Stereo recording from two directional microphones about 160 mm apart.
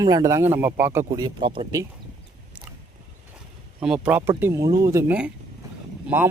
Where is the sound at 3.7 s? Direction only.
5° right (ahead or behind).